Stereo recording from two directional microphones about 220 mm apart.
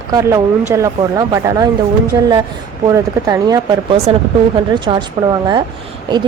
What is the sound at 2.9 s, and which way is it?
Speech, 15° right (ahead or behind).